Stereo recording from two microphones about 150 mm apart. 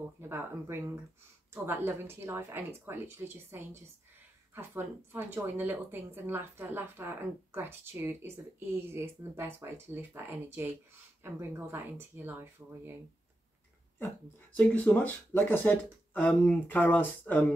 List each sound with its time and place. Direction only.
0.2 s speech: 15° right (ahead or behind)
14.6 s speech: 10° left (ahead or behind)